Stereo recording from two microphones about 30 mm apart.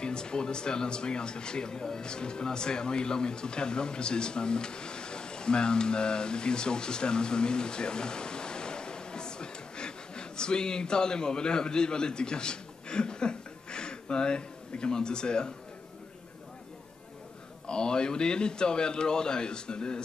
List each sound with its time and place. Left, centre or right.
0.0 s speech: left
17.6 s a man's voice: left